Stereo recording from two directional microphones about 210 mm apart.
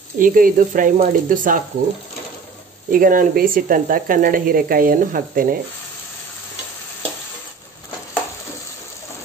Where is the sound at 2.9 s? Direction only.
40° right (ahead or behind).